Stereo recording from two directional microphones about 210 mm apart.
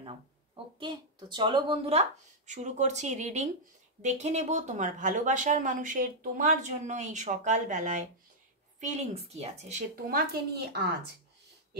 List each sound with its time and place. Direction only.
0.7 s speech: 20° right (ahead or behind); by 10.8 s 50° right (ahead or behind)